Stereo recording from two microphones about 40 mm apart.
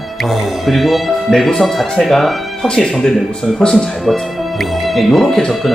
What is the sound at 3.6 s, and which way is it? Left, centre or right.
Speech, centre.